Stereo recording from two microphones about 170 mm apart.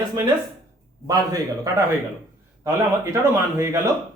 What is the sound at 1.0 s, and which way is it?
Speech, 20° right (ahead or behind).